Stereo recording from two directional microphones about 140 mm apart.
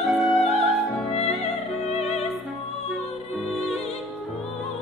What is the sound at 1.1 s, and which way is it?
Music, 50° left (ahead or behind).